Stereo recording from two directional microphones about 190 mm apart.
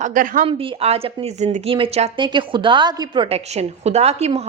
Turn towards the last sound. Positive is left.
turn(degrees=-35)  # may be behind; listen again after turning